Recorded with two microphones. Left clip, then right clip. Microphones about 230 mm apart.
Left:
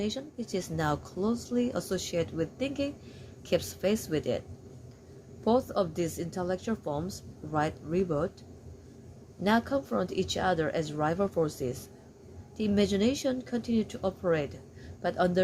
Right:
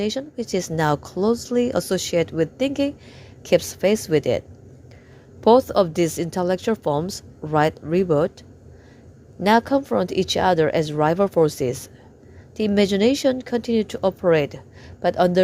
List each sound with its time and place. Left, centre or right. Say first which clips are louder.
0.0 s a woman's voice: right 10 dB; right
5.5 s a woman's voice: right 12 dB; right
9.4 s a woman's voice: right 10 dB; right